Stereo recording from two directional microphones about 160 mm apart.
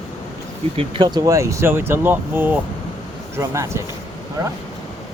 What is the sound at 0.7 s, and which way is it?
Speech, 35° right (ahead or behind).